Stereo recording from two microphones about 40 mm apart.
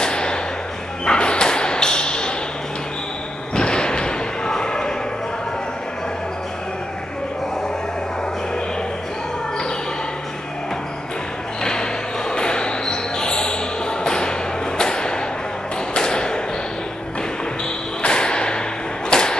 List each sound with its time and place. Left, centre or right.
0.0 s thump: left
1.0 s bow-wow: left
3.5 s slam: left
12.3 s a sound: left
14.0 s music: left
14.8 s a sound: centre
16.0 s thump: centre
18.0 s whip: left
19.0 s arrow: centre